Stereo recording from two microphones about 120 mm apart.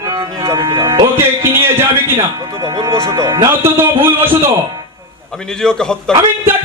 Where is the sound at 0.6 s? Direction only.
45° right (ahead or behind).